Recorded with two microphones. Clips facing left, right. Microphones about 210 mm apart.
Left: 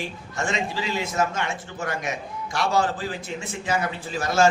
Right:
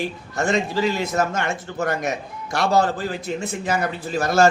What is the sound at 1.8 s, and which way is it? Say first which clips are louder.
A man's voice: right 6 dB; 40° right (ahead or behind).